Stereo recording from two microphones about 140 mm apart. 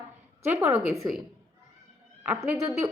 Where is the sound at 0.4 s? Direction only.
15° right (ahead or behind).